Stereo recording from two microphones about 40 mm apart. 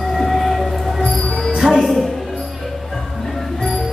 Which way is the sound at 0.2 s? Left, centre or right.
Centre.